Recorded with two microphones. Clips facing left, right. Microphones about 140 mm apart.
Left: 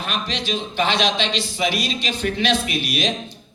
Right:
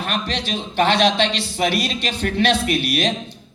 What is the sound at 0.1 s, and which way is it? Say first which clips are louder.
A man's voice: even; 60° right (ahead or behind).